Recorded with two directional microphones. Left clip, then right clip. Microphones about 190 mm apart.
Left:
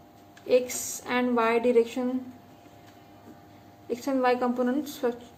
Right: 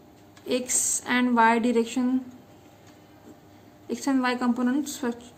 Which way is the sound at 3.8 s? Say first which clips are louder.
Left 1 dB; 40° right (ahead or behind).